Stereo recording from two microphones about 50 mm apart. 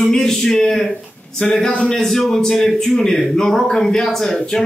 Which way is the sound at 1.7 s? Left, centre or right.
Centre.